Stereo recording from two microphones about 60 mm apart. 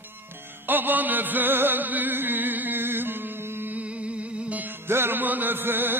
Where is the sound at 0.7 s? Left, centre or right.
Right.